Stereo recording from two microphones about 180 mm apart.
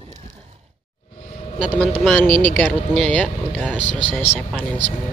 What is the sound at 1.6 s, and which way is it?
Speech, 5° right (ahead or behind).